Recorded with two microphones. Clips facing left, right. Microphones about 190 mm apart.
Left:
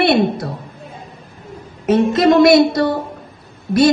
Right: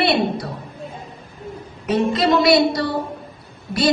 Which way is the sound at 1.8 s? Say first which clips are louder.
Left 5 dB; 45° left (ahead or behind).